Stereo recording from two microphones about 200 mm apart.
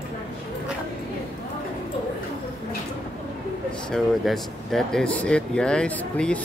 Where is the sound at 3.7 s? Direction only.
5° left (ahead or behind).